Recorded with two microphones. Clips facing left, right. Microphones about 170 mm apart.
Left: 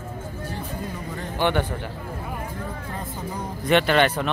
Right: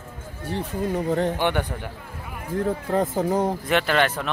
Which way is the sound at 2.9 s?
70° right (ahead or behind).